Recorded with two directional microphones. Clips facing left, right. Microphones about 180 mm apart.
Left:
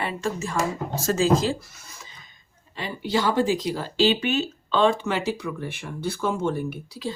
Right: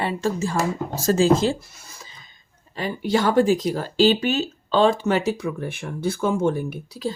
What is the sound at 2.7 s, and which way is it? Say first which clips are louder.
Speech: right 4 dB; 45° right (ahead or behind).